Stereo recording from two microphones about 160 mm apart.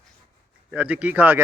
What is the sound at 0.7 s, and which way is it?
Speech, 10° right (ahead or behind).